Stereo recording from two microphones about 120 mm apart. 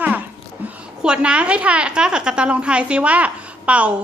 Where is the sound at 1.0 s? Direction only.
10° right (ahead or behind).